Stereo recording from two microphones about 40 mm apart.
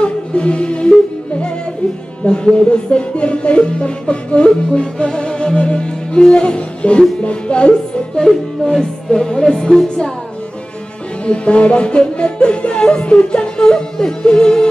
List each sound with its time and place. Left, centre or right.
0.0 s music: left
2.2 s speech: left
8.2 s music: centre
9.8 s speech: left
11.2 s speech: left